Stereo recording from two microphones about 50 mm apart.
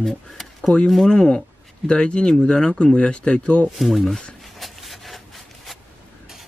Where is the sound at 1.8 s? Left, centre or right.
Left.